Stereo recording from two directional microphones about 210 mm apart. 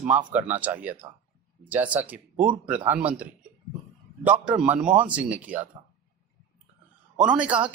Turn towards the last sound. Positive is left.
turn(degrees=-5)  # may be behind; listen again after turning